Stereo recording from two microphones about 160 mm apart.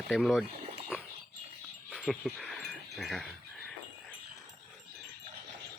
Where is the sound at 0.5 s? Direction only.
40° right (ahead or behind).